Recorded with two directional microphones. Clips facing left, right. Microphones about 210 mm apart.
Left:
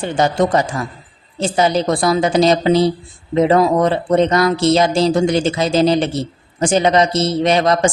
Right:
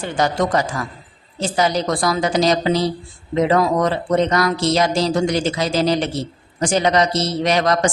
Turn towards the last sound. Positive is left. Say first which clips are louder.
# left 3 dB
turn(degrees=25)  # may be behind; listen again after turning